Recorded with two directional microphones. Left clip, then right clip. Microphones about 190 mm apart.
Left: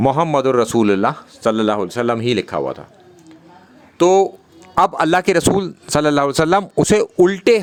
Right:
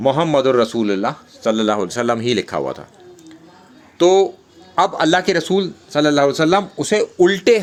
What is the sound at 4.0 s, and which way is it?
Speech, 30° left (ahead or behind).